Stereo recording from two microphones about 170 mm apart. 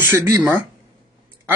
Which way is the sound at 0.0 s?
15° right (ahead or behind).